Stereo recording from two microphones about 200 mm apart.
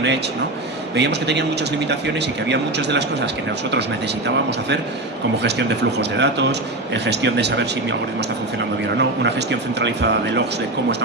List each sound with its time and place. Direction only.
0.9 s a man's voice: 60° right (ahead or behind)
2.5 s a man's voice: 60° right (ahead or behind)
5.4 s a man's voice: 60° right (ahead or behind)
9.0 s a man's voice: 60° right (ahead or behind)